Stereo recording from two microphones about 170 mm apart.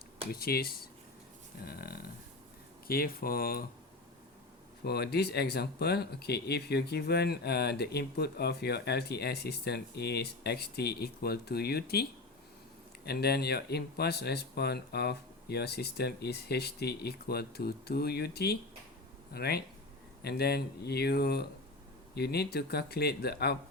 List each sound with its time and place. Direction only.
0.3 s speech: 65° left (ahead or behind)
4.8 s speech: 70° left (ahead or behind)
13.1 s speech: 70° left (ahead or behind)